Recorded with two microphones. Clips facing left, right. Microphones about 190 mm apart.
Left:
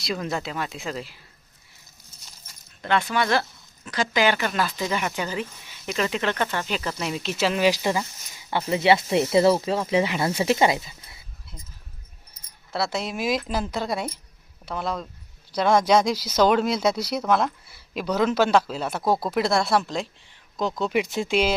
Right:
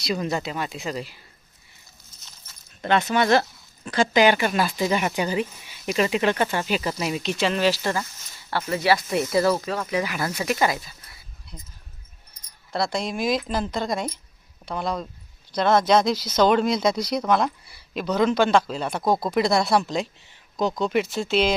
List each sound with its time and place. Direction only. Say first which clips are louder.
0.0 s speech: right 2 dB; centre (ahead or behind)
2.8 s speech: right 3 dB; 20° right (ahead or behind); by 11.2 s 20° left (ahead or behind)
12.7 s speech: right 1 dB; 5° left (ahead or behind)
21.0 s speech: left 1 dB; 15° left (ahead or behind)